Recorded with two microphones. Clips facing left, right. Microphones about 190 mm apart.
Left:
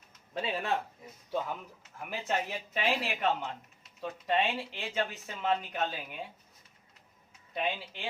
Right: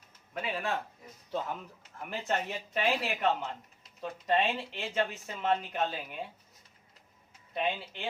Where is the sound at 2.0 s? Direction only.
5° left (ahead or behind).